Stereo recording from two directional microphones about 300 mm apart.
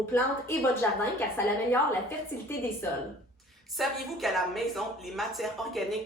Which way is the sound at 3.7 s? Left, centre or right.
Centre.